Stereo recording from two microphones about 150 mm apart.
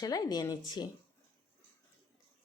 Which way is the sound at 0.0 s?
25° left (ahead or behind).